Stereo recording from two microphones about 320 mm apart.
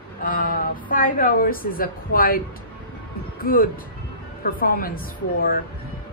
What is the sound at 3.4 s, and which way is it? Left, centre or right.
A woman's voice, left.